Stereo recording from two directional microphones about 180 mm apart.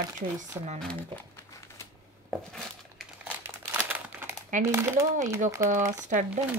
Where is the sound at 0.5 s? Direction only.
15° right (ahead or behind).